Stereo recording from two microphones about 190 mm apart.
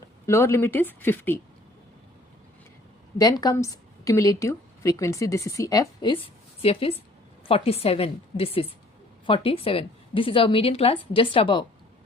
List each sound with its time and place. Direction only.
0.3 s a woman's voice: 15° left (ahead or behind)
3.2 s a woman's voice: 20° left (ahead or behind)